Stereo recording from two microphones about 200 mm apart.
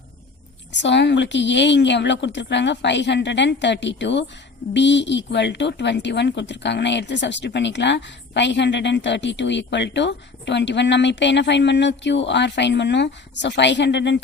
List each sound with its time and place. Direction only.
0.7 s a woman's voice: 60° left (ahead or behind)